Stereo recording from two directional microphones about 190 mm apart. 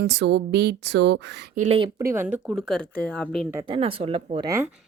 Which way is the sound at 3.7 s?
30° right (ahead or behind).